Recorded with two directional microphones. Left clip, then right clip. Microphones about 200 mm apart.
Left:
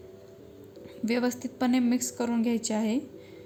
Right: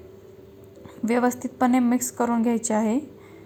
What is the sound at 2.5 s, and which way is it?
Speech, 10° left (ahead or behind).